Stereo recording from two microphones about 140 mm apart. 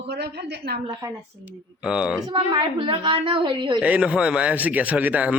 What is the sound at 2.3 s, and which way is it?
A woman's voice, 35° right (ahead or behind).